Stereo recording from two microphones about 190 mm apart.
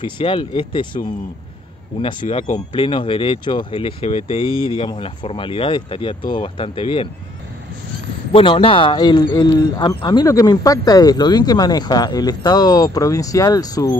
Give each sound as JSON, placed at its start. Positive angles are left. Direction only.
{"t": 0.0, "sound": "a man's voice", "side_deg": 25}
{"t": 2.2, "sound": "speech", "side_deg": 40}
{"t": 2.7, "sound": "a man's voice", "side_deg": 25}
{"t": 8.3, "sound": "a man's voice", "side_deg": 30}